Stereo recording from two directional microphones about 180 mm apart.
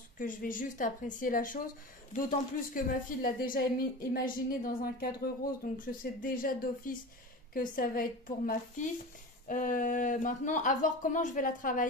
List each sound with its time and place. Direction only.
0.2 s speech: 50° left (ahead or behind)
2.7 s speech: 50° left (ahead or behind)